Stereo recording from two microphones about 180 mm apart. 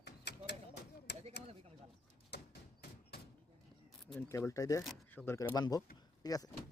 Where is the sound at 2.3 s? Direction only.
70° left (ahead or behind).